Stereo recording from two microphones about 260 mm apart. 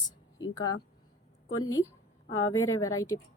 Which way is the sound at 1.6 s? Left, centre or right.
Centre.